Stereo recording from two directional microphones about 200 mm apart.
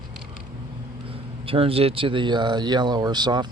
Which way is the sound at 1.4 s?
30° right (ahead or behind).